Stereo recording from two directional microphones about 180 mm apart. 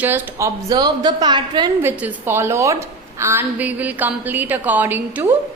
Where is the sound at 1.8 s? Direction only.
10° right (ahead or behind).